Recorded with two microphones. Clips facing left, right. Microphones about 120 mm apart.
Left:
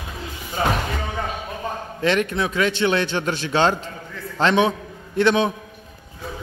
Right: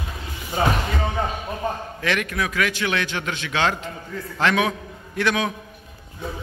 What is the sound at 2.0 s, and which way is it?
A man's voice, 30° left (ahead or behind).